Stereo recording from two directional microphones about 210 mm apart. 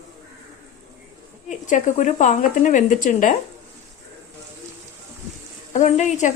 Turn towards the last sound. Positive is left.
turn(degrees=35)  # may be behind; listen again after turning